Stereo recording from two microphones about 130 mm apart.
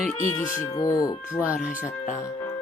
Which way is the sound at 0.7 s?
25° left (ahead or behind).